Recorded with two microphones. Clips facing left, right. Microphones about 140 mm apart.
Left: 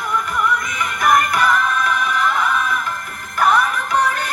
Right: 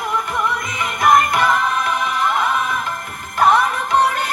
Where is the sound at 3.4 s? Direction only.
25° right (ahead or behind).